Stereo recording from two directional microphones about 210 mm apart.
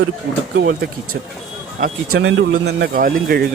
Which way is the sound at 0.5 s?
50° right (ahead or behind).